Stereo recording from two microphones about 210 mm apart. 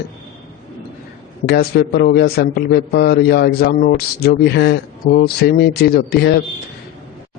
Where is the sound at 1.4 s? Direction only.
50° left (ahead or behind).